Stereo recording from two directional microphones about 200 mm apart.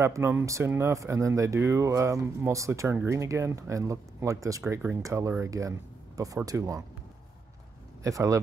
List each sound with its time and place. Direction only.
0.0 s speech: 15° right (ahead or behind)
8.0 s speech: 15° right (ahead or behind)